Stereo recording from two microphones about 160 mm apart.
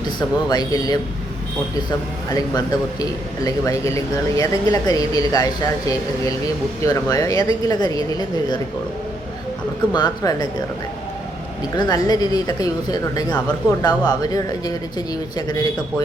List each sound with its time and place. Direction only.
0.0 s speech: 25° left (ahead or behind)
2.3 s speech: 20° left (ahead or behind)
6.8 s speech: 20° left (ahead or behind)
9.9 s speech: 25° left (ahead or behind)
11.8 s speech: 25° left (ahead or behind)